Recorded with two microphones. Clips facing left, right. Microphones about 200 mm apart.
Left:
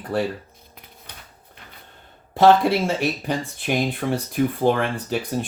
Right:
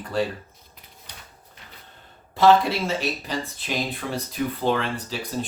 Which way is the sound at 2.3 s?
55° left (ahead or behind).